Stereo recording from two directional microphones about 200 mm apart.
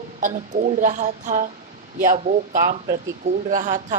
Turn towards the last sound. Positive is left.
turn(degrees=-40)  # may be behind; listen again after turning